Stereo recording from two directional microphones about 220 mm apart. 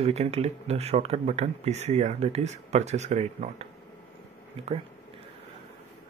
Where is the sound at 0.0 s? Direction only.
30° right (ahead or behind).